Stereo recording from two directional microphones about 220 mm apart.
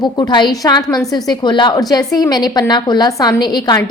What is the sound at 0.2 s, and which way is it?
A woman's voice, 20° left (ahead or behind).